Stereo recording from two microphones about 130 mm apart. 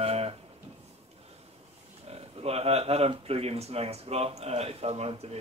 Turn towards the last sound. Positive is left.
turn(degrees=-55)  # may be behind; listen again after turning